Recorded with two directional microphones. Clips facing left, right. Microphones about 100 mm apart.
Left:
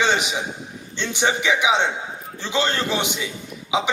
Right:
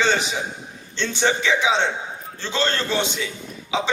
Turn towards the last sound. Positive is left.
turn(degrees=15)  # may be behind; listen again after turning